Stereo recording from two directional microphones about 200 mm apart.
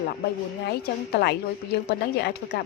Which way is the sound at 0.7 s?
55° left (ahead or behind).